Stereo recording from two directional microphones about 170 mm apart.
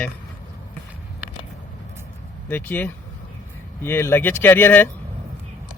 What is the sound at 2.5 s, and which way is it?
Speech, 10° left (ahead or behind).